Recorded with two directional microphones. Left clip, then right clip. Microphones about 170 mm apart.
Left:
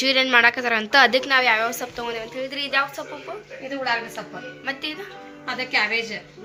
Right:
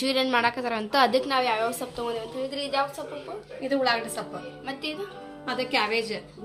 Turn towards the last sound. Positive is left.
turn(degrees=-35)  # may be behind; listen again after turning